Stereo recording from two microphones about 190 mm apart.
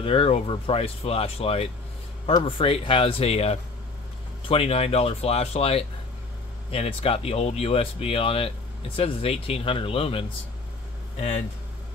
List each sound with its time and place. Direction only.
0.0 s speech: 30° left (ahead or behind)